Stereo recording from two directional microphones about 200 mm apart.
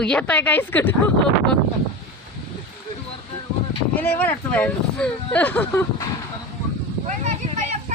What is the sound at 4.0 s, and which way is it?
Speech, 10° left (ahead or behind).